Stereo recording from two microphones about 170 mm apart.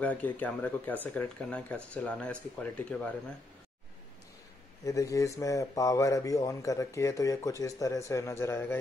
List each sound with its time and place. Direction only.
0.0 s speech: 10° left (ahead or behind)
4.8 s speech: 20° left (ahead or behind)